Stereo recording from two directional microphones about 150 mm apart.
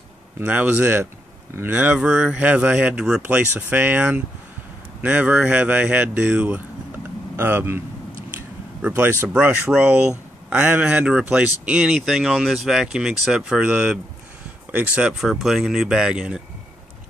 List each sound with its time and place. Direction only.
0.5 s speech: 10° right (ahead or behind)
8.3 s a sound: 10° right (ahead or behind)
9.2 s speech: 10° right (ahead or behind)